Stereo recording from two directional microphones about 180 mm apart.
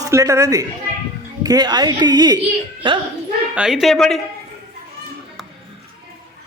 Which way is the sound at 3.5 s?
5° right (ahead or behind).